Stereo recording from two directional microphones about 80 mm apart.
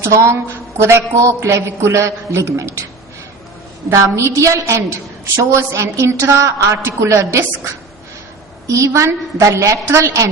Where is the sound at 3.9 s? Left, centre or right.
Right.